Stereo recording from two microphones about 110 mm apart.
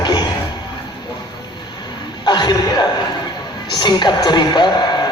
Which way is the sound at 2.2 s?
40° left (ahead or behind).